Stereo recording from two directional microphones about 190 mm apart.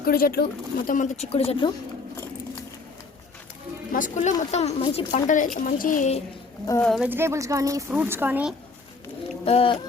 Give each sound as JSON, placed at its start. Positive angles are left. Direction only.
{"t": 0.0, "sound": "speech", "side_deg": 50}
{"t": 0.9, "sound": "speech", "side_deg": 40}
{"t": 3.9, "sound": "speech", "side_deg": 40}
{"t": 6.8, "sound": "speech", "side_deg": 0}
{"t": 7.1, "sound": "a woman's voice", "side_deg": -15}
{"t": 9.4, "sound": "a sound", "side_deg": 30}